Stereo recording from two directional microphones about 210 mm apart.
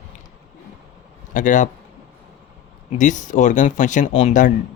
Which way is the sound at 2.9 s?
35° left (ahead or behind).